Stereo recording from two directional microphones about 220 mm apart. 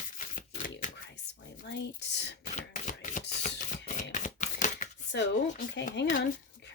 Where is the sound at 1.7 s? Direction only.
50° left (ahead or behind).